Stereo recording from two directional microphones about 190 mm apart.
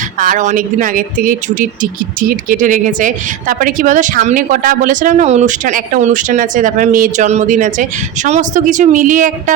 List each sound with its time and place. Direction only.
0.2 s speech: 45° right (ahead or behind)